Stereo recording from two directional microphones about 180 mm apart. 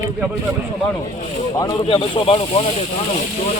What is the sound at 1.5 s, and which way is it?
Speech, 20° left (ahead or behind).